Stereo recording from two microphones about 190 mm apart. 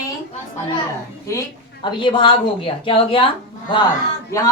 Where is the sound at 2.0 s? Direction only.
25° left (ahead or behind).